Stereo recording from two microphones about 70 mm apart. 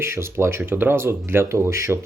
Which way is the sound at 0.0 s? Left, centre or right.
Right.